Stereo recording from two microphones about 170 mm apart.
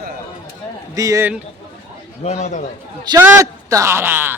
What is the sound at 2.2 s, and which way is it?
Speech, 40° left (ahead or behind).